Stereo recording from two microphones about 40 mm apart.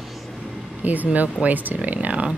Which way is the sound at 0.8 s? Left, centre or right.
Right.